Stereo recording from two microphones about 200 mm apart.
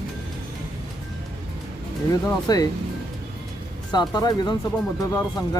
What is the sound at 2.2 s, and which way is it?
Speech, 20° left (ahead or behind).